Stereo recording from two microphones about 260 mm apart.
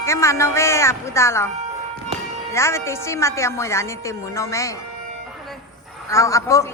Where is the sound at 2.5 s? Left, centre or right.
Centre.